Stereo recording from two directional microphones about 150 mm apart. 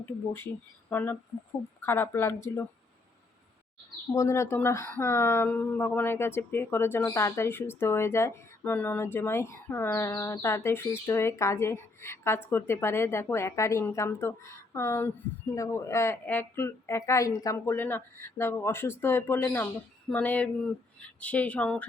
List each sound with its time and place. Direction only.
0.0 s speech: 15° left (ahead or behind)
4.1 s speech: 20° left (ahead or behind)